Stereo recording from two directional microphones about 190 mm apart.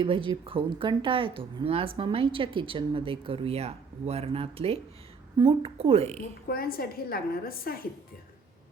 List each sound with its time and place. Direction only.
0.0 s a woman's voice: 25° right (ahead or behind)
6.5 s a woman's voice: 50° left (ahead or behind)